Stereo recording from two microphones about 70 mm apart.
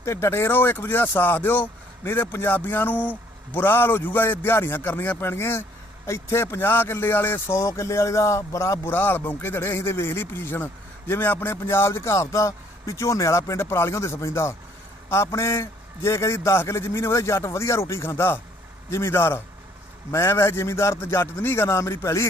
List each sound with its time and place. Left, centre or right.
0.0 s a man's voice: left
8.9 s a man's voice: left